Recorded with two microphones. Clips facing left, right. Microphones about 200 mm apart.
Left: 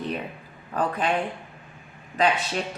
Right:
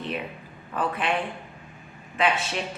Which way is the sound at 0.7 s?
40° left (ahead or behind).